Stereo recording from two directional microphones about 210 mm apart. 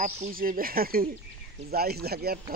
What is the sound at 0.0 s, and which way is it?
Speech, 40° right (ahead or behind).